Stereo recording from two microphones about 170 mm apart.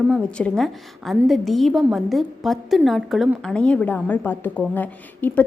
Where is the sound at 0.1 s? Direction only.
5° left (ahead or behind).